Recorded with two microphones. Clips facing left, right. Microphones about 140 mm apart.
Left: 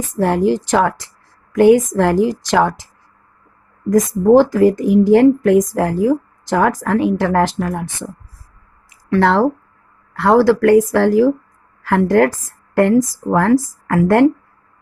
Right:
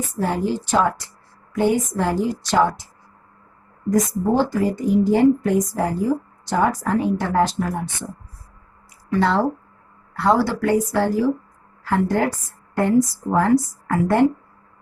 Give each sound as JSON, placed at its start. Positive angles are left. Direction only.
{"t": 0.1, "sound": "speech", "side_deg": 90}
{"t": 9.0, "sound": "speech", "side_deg": 85}